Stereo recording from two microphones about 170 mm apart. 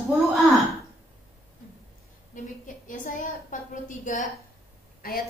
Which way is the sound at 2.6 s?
50° left (ahead or behind).